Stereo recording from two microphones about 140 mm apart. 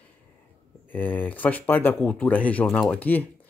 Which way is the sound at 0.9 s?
15° left (ahead or behind).